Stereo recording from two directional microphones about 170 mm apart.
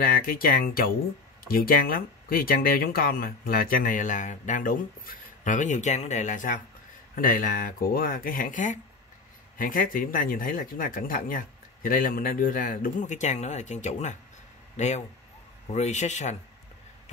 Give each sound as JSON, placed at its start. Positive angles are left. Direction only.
{"t": 0.0, "sound": "speech", "side_deg": 60}